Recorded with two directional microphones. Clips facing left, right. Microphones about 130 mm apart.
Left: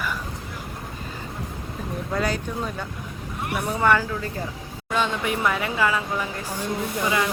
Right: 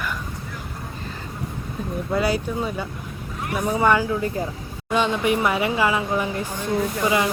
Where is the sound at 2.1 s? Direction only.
5° right (ahead or behind).